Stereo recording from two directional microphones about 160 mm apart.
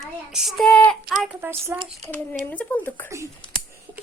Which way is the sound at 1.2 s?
10° right (ahead or behind).